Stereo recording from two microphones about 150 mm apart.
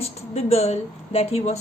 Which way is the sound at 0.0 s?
45° left (ahead or behind).